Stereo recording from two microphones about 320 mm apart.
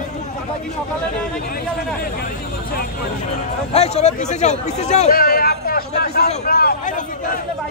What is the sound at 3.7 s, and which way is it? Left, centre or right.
A man's voice, left.